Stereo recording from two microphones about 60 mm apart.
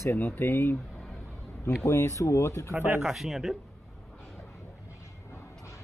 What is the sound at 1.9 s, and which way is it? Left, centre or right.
Speech, left.